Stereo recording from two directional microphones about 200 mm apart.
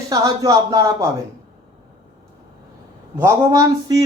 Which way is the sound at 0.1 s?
15° right (ahead or behind).